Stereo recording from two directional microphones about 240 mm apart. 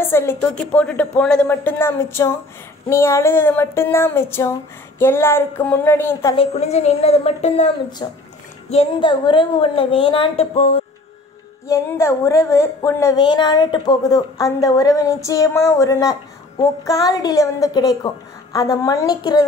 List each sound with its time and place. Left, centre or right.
0.0 s a woman's voice: centre
6.3 s a woman's voice: left
8.0 s a woman's voice: centre
11.6 s a woman's voice: centre